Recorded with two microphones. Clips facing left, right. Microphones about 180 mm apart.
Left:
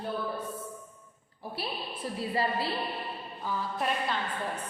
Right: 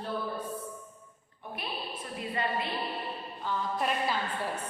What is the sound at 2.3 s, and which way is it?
Speech, 30° left (ahead or behind).